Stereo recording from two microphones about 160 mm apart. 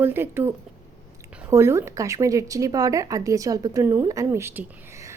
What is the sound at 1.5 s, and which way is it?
A woman's voice, 15° right (ahead or behind).